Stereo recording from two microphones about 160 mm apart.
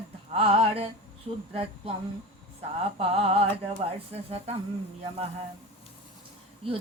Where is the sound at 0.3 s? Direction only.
35° right (ahead or behind).